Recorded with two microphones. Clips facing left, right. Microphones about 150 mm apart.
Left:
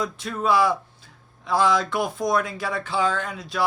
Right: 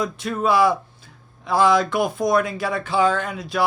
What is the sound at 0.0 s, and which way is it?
Speech, 60° right (ahead or behind).